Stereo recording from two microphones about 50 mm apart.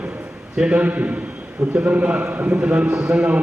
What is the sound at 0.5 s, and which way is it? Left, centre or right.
Speech, centre.